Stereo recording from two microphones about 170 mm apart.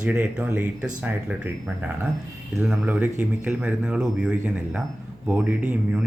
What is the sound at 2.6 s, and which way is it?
Speech, 5° right (ahead or behind).